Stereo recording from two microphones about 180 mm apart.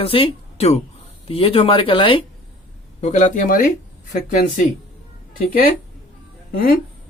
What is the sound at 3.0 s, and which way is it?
Speech, 45° left (ahead or behind).